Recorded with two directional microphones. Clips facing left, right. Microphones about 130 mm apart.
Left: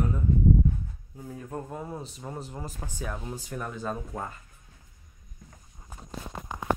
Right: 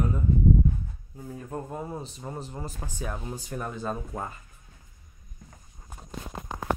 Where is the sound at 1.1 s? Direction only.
Centre (ahead or behind).